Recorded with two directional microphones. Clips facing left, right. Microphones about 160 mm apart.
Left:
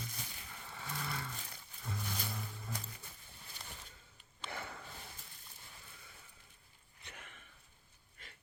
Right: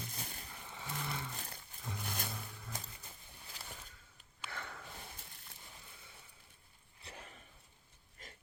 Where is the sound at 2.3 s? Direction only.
Centre (ahead or behind).